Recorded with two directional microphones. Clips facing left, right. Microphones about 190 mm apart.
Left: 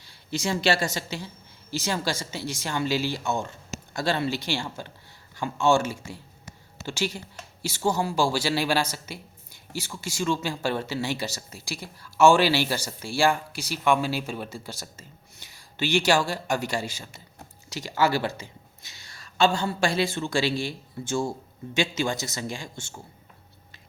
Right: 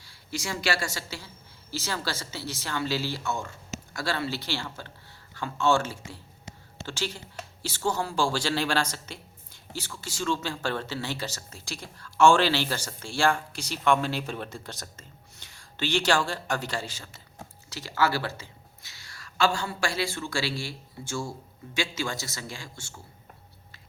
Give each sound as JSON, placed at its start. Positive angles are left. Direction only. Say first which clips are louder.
{"t": 0.0, "sound": "a woman's voice", "louder": "left 6 dB", "side_deg": 20}